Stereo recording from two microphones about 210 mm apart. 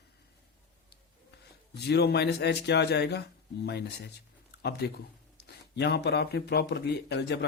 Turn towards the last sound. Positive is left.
turn(degrees=55)  # may be behind; listen again after turning